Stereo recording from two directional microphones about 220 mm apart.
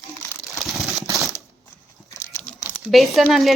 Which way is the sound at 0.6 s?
Centre (ahead or behind).